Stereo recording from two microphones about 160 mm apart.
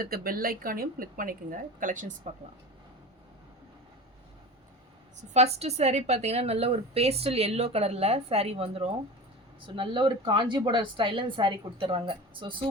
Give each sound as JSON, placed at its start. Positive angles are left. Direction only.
{"t": 0.0, "sound": "speech", "side_deg": -65}
{"t": 5.3, "sound": "a woman's voice", "side_deg": -40}